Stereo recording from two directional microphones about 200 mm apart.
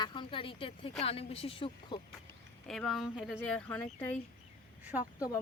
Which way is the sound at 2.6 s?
Centre (ahead or behind).